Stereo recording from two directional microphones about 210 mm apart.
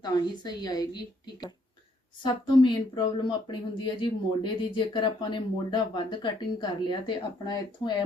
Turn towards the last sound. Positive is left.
turn(degrees=20)  # may be behind; listen again after turning